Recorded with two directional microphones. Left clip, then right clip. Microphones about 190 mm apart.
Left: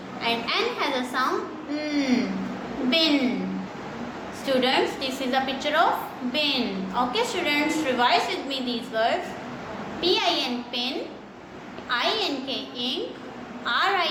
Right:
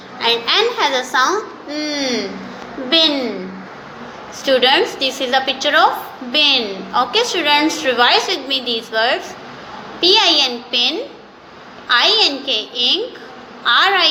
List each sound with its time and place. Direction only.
0.2 s a woman's voice: 25° right (ahead or behind)
4.4 s a woman's voice: 25° right (ahead or behind)